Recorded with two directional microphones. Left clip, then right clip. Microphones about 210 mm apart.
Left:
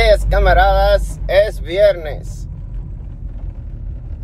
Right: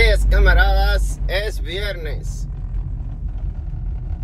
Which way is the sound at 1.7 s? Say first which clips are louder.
Left 17 dB; 35° left (ahead or behind).